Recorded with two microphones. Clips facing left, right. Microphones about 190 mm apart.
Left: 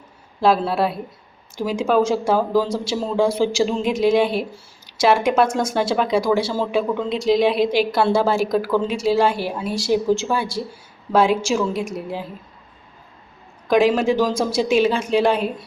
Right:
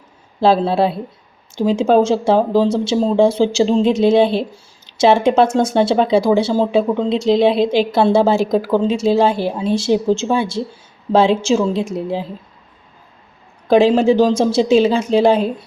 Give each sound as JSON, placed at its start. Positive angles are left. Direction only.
{"t": 0.3, "sound": "speech", "side_deg": -30}
{"t": 13.7, "sound": "speech", "side_deg": -30}